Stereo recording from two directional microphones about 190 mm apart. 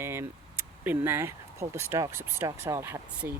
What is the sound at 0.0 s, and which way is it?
Speech, 15° right (ahead or behind).